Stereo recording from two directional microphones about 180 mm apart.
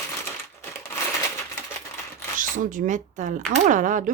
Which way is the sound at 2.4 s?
45° right (ahead or behind).